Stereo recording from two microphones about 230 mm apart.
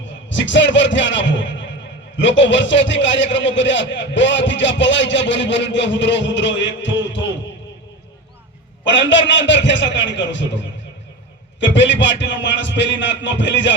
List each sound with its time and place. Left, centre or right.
0.3 s a man's voice: left
8.8 s a man's voice: left
11.6 s a man's voice: left